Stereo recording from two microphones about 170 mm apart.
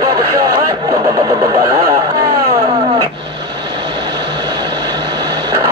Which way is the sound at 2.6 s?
30° right (ahead or behind).